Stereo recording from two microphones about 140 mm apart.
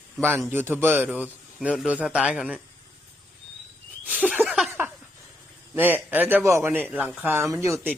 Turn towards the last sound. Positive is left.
turn(degrees=-15)  # may be behind; listen again after turning